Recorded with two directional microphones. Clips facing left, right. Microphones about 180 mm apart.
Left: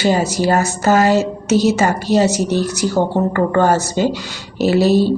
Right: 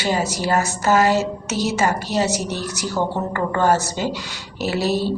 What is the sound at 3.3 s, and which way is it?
Speech, 40° left (ahead or behind).